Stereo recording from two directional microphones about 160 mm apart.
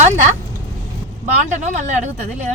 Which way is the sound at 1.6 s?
50° right (ahead or behind).